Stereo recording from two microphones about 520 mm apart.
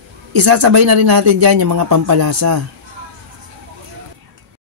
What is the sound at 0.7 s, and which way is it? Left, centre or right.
Speech, right.